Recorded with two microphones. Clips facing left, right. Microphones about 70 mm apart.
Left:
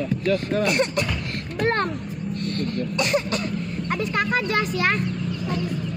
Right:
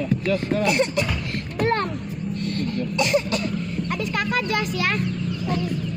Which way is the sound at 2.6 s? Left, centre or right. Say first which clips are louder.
Right 2 dB; left.